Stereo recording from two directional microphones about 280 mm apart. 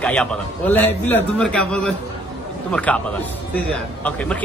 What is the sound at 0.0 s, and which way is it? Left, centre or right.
A man's voice, centre.